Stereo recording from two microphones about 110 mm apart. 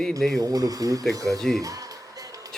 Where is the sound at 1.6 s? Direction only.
35° right (ahead or behind).